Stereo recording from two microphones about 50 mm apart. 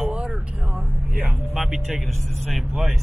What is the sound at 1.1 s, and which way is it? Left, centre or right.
Speech, centre.